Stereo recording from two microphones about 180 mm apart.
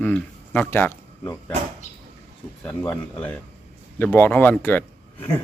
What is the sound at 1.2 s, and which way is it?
Speech, 20° left (ahead or behind).